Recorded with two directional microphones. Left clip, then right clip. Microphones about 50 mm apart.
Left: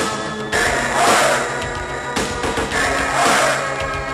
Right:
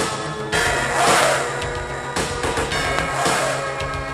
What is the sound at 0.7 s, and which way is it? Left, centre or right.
Music, centre.